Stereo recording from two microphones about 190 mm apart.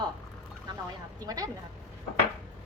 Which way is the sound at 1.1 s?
20° right (ahead or behind).